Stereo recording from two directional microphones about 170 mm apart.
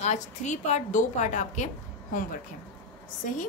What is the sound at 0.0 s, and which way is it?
A woman's voice, 45° left (ahead or behind).